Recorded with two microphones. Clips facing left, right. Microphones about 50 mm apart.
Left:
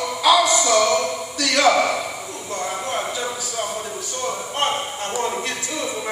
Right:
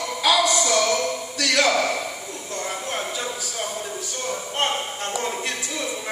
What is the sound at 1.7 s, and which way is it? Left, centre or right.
Speech, left.